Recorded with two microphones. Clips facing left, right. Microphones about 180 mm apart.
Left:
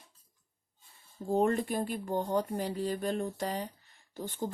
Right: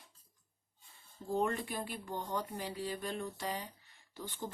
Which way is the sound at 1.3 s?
45° left (ahead or behind).